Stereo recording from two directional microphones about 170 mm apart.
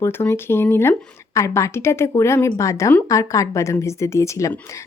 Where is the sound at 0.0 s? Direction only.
15° left (ahead or behind).